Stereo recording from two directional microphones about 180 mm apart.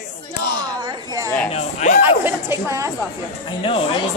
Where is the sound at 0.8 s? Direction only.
20° right (ahead or behind).